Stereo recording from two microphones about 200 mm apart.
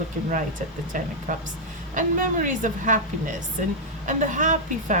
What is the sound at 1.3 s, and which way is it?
Speech, 40° right (ahead or behind).